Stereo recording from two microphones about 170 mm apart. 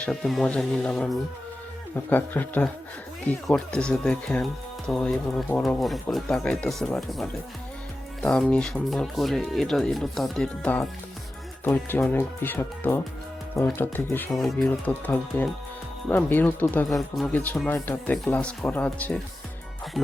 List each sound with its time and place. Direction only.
0.0 s speech: centre (ahead or behind)
14.3 s speech: centre (ahead or behind)